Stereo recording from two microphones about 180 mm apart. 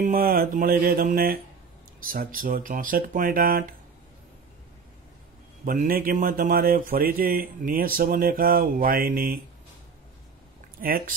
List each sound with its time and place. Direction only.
0.0 s a man's voice: 55° right (ahead or behind)
5.7 s a man's voice: 50° right (ahead or behind)
10.8 s a man's voice: 50° right (ahead or behind)